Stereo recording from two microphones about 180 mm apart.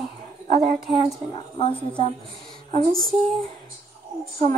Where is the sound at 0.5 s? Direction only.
40° right (ahead or behind).